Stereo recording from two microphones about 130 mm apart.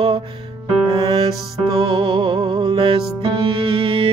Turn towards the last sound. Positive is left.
turn(degrees=-40)  # may be behind; listen again after turning